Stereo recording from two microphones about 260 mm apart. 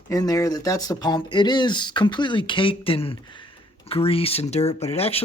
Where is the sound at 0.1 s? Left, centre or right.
Centre.